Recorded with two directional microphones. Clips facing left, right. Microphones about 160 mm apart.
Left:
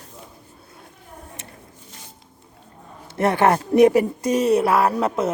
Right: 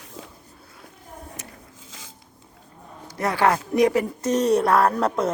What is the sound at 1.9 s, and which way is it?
Zipper, 90° right.